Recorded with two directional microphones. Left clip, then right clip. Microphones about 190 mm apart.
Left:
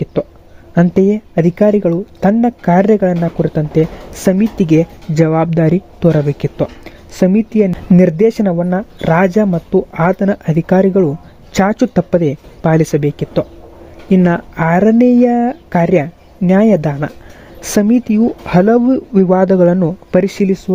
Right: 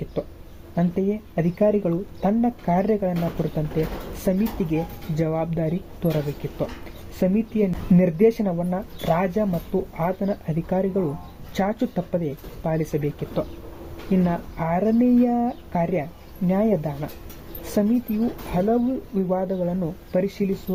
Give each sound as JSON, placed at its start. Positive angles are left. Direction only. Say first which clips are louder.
{"t": 0.1, "sound": "a sound", "louder": "left 11 dB", "side_deg": 55}
{"t": 0.8, "sound": "speech", "louder": "left 13 dB", "side_deg": 55}
{"t": 18.5, "sound": "speech", "louder": "left 12 dB", "side_deg": 60}